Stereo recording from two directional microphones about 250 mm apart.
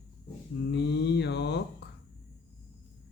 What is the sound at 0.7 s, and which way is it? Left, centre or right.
Mantra, left.